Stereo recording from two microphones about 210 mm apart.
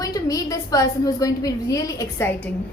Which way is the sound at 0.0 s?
15° left (ahead or behind).